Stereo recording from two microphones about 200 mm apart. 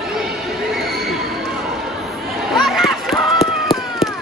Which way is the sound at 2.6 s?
Centre (ahead or behind).